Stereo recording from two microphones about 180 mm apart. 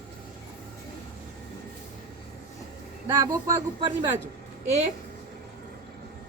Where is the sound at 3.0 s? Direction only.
20° right (ahead or behind).